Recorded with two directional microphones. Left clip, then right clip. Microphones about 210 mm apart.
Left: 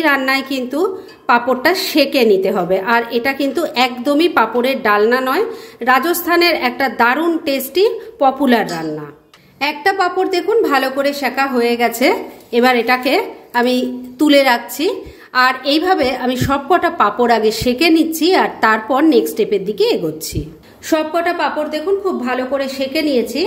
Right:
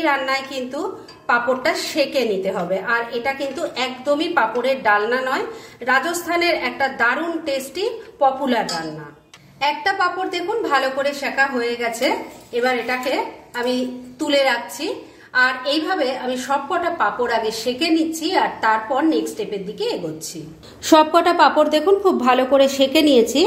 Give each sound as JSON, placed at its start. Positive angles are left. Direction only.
{"t": 0.0, "sound": "a woman's voice", "side_deg": 40}
{"t": 12.5, "sound": "a woman's voice", "side_deg": 50}
{"t": 20.9, "sound": "a woman's voice", "side_deg": -20}